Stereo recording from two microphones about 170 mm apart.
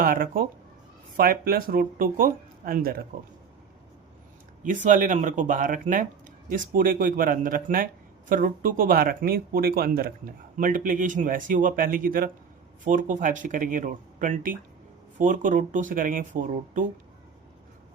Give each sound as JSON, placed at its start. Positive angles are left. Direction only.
{"t": 0.0, "sound": "speech", "side_deg": -55}
{"t": 4.6, "sound": "speech", "side_deg": -50}